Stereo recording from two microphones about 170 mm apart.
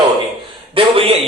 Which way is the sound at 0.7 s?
35° right (ahead or behind).